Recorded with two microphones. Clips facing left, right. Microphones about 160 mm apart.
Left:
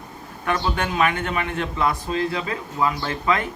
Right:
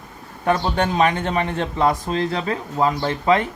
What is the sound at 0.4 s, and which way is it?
A man's voice, 35° right (ahead or behind).